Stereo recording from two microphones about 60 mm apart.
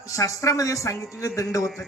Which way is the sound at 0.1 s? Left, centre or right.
Left.